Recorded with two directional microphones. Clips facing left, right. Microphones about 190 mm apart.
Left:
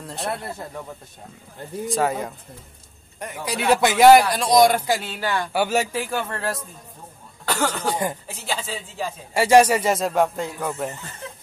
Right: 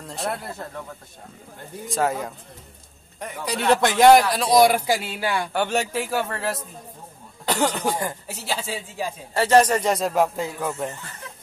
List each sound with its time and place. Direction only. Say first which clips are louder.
0.0 s a man's voice: even; centre (ahead or behind)
1.9 s a man's voice: left 1 dB; centre (ahead or behind)
5.5 s a man's voice: left 2 dB; 5° left (ahead or behind)
7.4 s cough: right 1 dB; 15° right (ahead or behind)
7.9 s speech: left 2 dB; 20° left (ahead or behind)
8.3 s speech: even; 5° right (ahead or behind)
9.3 s a man's voice: left 2 dB; 10° left (ahead or behind)